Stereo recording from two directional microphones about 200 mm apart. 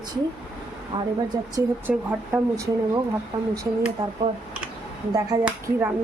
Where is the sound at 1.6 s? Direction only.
10° right (ahead or behind).